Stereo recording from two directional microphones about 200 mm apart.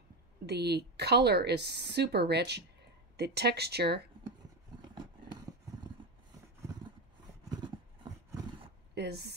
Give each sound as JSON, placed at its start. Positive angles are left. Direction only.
{"t": 0.5, "sound": "speech", "side_deg": -55}
{"t": 7.6, "sound": "horse", "side_deg": -25}
{"t": 8.9, "sound": "a sound", "side_deg": -55}